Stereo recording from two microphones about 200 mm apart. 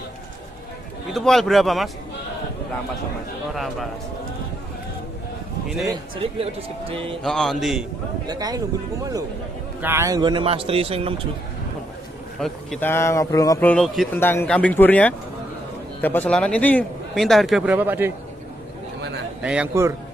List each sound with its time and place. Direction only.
1.1 s a man's voice: centre (ahead or behind)
3.5 s a man's voice: centre (ahead or behind)
5.9 s speech: 25° right (ahead or behind)
7.2 s a man's voice: centre (ahead or behind)
8.3 s speech: 20° right (ahead or behind)
9.8 s speech: 10° right (ahead or behind); by 11.1 s 30° right (ahead or behind)
12.4 s a man's voice: 5° left (ahead or behind)
19.4 s a man's voice: 5° right (ahead or behind)